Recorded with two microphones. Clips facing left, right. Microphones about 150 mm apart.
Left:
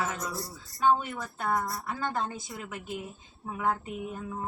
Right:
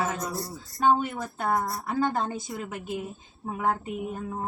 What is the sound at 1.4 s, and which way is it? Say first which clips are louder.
A woman's voice: right 3 dB; 40° right (ahead or behind).